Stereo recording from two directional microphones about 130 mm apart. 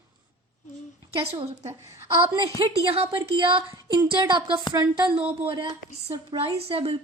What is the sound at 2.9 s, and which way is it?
A woman's voice, 45° right (ahead or behind).